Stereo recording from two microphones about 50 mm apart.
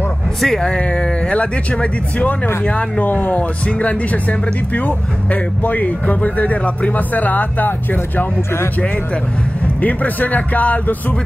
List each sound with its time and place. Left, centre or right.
0.4 s speech: centre; by 8.3 s left
9.8 s speech: left